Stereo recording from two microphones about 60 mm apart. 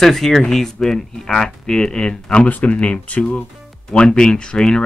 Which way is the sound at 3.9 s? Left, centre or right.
Centre.